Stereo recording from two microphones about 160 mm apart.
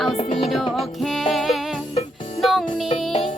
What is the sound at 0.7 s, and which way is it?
Music, centre (ahead or behind).